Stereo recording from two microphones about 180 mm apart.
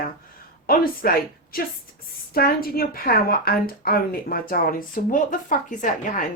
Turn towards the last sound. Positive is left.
turn(degrees=45)  # may be behind; listen again after turning